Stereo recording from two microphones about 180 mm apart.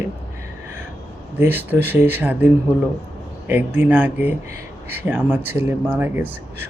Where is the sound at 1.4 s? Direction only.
10° right (ahead or behind).